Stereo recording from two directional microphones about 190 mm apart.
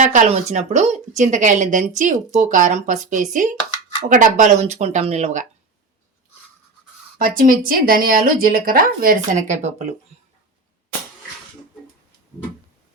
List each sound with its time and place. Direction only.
0.0 s speech: 40° right (ahead or behind)
7.2 s speech: 45° right (ahead or behind)